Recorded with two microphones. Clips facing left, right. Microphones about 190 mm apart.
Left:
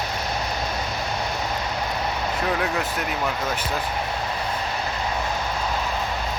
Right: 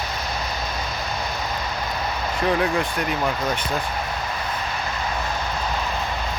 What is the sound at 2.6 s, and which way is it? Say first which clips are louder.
Speech: right 3 dB; 5° left (ahead or behind).